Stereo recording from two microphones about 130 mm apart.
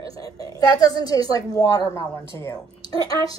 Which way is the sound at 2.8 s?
45° right (ahead or behind).